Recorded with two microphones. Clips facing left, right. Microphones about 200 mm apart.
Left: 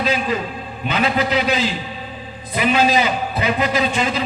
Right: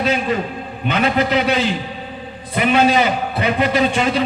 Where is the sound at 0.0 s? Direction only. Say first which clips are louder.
Right 2 dB; 55° right (ahead or behind).